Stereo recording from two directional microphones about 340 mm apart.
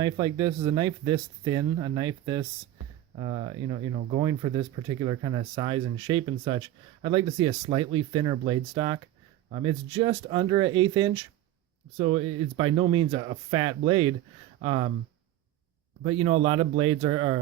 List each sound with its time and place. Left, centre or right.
0.0 s speech: centre
16.0 s speech: centre